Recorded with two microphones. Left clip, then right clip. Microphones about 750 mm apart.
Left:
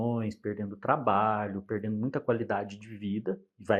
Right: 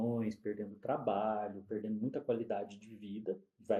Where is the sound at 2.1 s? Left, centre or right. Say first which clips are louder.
Left 7 dB; left.